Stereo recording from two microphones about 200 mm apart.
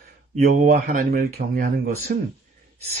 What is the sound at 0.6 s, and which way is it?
Speech, 40° right (ahead or behind).